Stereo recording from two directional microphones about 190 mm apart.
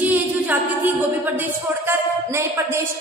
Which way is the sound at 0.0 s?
10° right (ahead or behind).